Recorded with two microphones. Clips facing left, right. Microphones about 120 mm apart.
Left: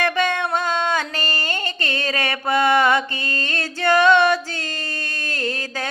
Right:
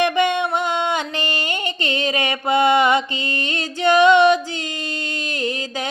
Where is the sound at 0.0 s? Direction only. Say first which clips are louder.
Right 3 dB; 20° right (ahead or behind).